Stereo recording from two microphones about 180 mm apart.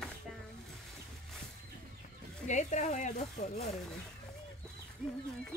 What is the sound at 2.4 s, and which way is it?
Speech, 40° left (ahead or behind).